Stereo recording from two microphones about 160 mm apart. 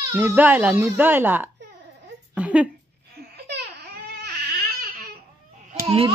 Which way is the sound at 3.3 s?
90° right.